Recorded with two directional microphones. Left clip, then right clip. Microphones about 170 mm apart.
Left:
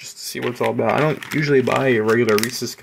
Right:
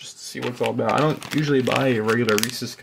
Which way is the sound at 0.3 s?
15° left (ahead or behind).